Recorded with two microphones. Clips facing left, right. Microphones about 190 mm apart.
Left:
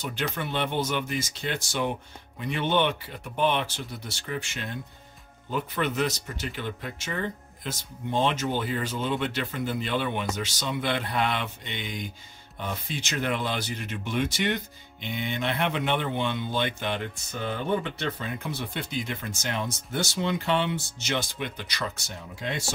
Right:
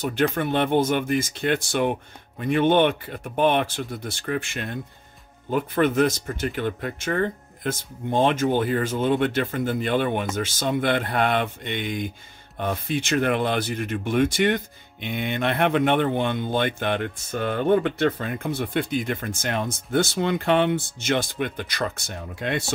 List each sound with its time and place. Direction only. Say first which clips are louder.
0.0 s speech: right 8 dB; 55° right (ahead or behind)